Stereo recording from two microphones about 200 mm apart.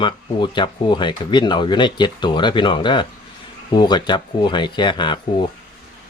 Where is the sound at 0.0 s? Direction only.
25° left (ahead or behind).